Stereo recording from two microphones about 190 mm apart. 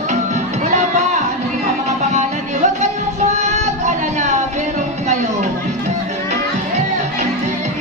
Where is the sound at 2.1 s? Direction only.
40° right (ahead or behind).